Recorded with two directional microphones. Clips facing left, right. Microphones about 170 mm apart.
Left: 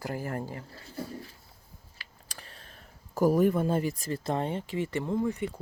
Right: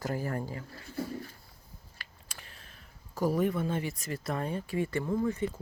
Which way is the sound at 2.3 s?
35° left (ahead or behind).